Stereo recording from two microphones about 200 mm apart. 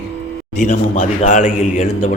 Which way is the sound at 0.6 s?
40° left (ahead or behind).